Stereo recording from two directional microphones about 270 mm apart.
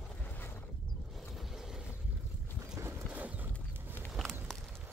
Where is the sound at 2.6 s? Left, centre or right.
Centre.